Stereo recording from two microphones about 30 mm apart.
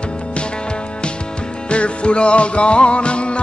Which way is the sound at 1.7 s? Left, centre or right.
Left.